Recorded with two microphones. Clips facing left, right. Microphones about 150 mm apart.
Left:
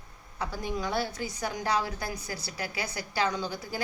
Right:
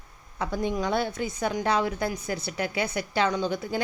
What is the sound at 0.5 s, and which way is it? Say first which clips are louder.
A woman's voice: right 5 dB; 20° right (ahead or behind).